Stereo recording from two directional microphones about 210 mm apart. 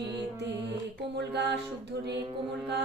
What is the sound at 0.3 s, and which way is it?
Mantra, 55° right (ahead or behind).